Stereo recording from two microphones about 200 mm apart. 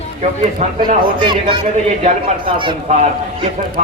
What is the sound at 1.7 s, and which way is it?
A man's voice, 35° right (ahead or behind).